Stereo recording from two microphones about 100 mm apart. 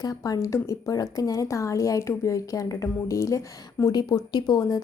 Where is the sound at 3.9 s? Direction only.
45° left (ahead or behind).